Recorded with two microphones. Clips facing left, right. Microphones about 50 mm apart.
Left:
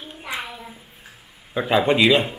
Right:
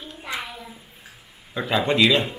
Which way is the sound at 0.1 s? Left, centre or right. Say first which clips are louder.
Left 1 dB; centre.